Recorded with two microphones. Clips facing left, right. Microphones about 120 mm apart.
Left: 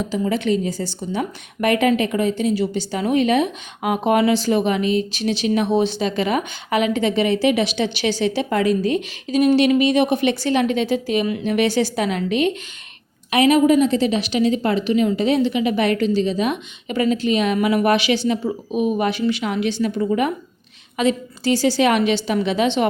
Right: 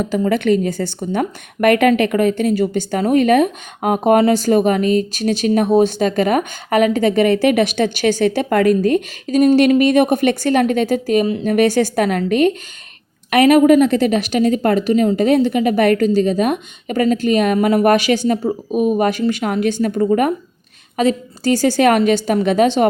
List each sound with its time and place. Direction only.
0.0 s a woman's voice: 55° right (ahead or behind)